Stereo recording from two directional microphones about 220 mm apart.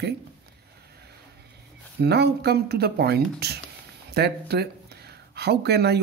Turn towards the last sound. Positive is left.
turn(degrees=-50)  # may be behind; listen again after turning